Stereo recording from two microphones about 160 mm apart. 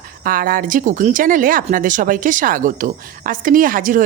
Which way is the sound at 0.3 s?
65° right (ahead or behind).